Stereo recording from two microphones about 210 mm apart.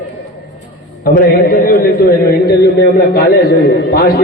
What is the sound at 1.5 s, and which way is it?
A man's voice, 45° left (ahead or behind).